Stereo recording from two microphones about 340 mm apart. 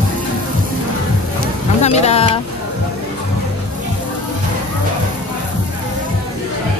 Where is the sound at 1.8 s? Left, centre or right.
Centre.